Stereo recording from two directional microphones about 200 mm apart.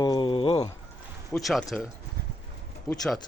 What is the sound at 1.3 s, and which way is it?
Speech, centre (ahead or behind).